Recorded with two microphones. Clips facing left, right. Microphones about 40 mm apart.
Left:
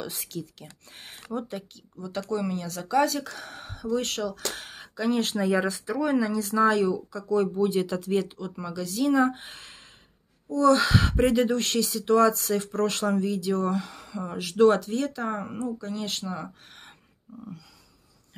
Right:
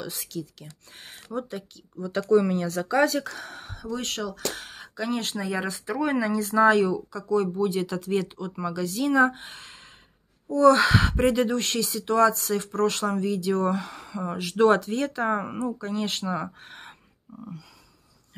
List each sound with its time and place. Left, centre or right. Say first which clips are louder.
0.0 s speech: right 1 dB; centre
2.0 s speech: right 8 dB; centre
3.3 s speech: right 2 dB; centre
5.9 s speech: right 1 dB; centre
7.1 s speech: even; centre
10.5 s speech: right 3 dB; centre
17.4 s speech: right 1 dB; centre